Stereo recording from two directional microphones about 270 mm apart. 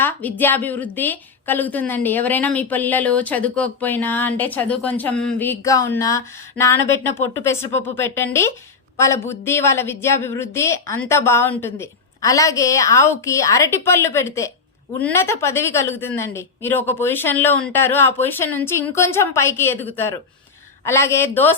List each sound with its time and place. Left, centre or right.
0.0 s a woman's voice: centre